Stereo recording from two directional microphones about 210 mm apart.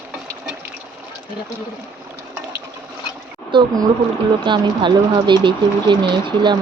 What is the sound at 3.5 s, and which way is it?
Speech, 25° right (ahead or behind).